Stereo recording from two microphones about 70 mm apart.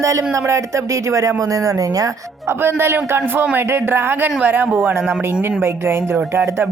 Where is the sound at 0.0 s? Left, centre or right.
Right.